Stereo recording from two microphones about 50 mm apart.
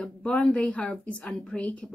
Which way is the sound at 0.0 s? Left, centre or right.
Left.